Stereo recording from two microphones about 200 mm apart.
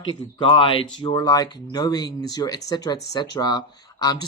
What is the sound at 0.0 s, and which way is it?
Speech, 25° left (ahead or behind).